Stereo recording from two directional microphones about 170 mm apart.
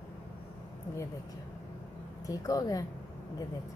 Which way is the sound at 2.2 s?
20° left (ahead or behind).